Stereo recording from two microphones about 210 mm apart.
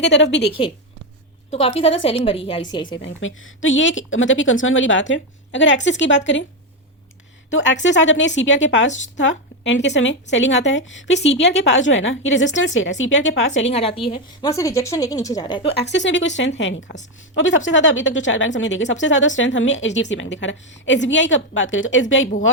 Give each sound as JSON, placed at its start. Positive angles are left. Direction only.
{"t": 0.0, "sound": "speech", "side_deg": 55}
{"t": 1.5, "sound": "a woman's voice", "side_deg": 30}
{"t": 3.0, "sound": "speech", "side_deg": 65}
{"t": 7.5, "sound": "speech", "side_deg": 60}
{"t": 13.7, "sound": "a woman's voice", "side_deg": 25}
{"t": 14.1, "sound": "a woman's voice", "side_deg": 15}
{"t": 15.7, "sound": "speech", "side_deg": 60}